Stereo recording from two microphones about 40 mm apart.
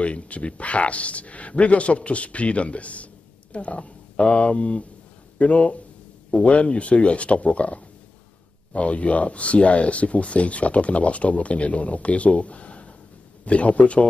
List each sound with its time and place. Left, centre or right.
0.0 s speech: left